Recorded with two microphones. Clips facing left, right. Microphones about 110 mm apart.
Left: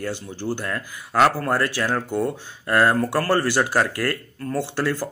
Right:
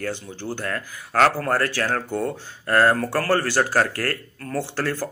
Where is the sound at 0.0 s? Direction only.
15° left (ahead or behind).